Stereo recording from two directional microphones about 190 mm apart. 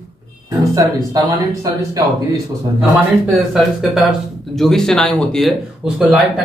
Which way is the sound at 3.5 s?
Centre (ahead or behind).